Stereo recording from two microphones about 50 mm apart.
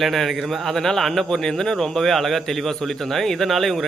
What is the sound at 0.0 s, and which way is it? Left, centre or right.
A man's voice, centre.